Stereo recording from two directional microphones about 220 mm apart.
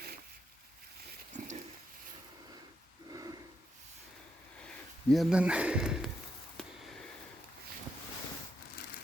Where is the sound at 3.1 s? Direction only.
15° right (ahead or behind).